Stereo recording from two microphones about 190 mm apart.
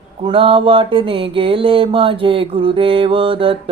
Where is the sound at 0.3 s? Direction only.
25° right (ahead or behind).